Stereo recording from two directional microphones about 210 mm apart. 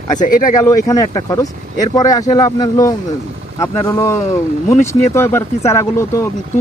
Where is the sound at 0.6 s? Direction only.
15° left (ahead or behind).